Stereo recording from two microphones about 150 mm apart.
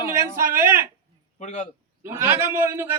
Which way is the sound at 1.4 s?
50° left (ahead or behind).